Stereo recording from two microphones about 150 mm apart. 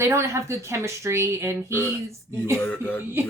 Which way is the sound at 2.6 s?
10° left (ahead or behind).